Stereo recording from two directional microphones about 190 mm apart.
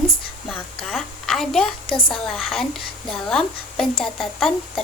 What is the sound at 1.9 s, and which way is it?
Speech, 25° left (ahead or behind).